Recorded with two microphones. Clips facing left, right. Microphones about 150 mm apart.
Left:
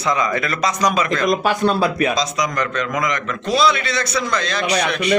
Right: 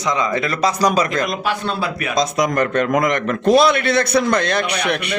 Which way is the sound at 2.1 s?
55° right (ahead or behind).